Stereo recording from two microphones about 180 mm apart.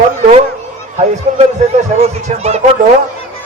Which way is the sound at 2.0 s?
35° right (ahead or behind).